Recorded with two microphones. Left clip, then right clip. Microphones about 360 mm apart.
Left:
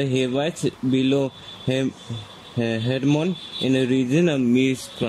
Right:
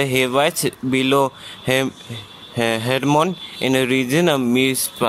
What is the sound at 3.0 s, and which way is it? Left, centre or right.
Speech, right.